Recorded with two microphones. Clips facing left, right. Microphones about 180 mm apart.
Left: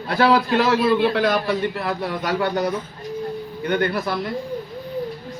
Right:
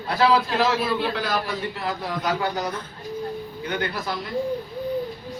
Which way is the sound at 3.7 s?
55° left (ahead or behind).